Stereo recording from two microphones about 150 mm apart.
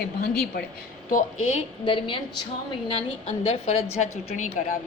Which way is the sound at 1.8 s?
35° left (ahead or behind).